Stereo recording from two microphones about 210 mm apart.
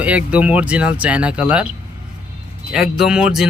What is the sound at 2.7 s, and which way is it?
Speech, centre (ahead or behind).